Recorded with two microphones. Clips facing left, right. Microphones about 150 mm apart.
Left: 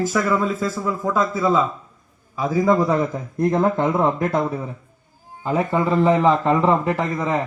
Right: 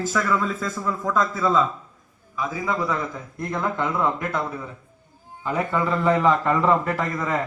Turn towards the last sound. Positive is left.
turn(degrees=20)  # may be behind; listen again after turning